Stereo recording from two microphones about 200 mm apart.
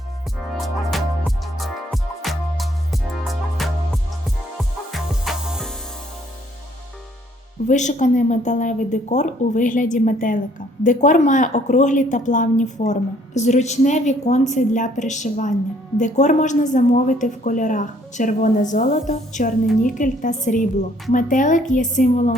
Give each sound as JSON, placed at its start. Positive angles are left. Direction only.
{"t": 0.5, "sound": "music", "side_deg": 0}
{"t": 7.7, "sound": "a woman's voice", "side_deg": 40}